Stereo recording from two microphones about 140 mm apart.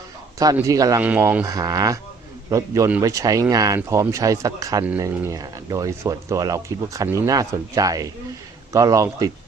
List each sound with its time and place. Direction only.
0.7 s speech: 25° right (ahead or behind)
1.0 s speech: 10° right (ahead or behind)
1.5 s speech: 25° right (ahead or behind)